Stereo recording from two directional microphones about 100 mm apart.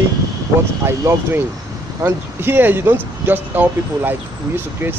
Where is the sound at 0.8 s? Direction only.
25° right (ahead or behind).